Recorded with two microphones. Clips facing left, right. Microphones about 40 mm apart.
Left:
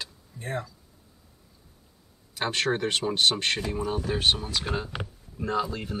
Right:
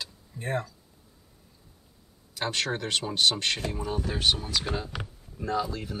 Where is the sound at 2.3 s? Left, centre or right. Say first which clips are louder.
Left 3 dB; left.